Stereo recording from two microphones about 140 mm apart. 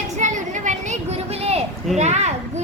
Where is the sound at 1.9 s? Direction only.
55° right (ahead or behind).